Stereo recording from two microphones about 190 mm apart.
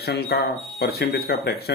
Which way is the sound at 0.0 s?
55° left (ahead or behind).